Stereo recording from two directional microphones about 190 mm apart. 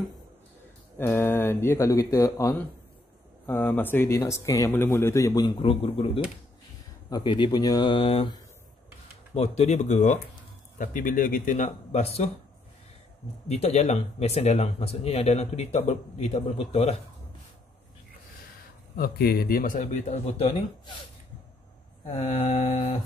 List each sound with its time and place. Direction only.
0.9 s a man's voice: 10° left (ahead or behind); by 12.3 s 35° left (ahead or behind)
13.5 s speech: 35° left (ahead or behind)
18.9 s a man's voice: 55° left (ahead or behind); by 21.0 s 30° left (ahead or behind)
22.0 s speech: 40° left (ahead or behind)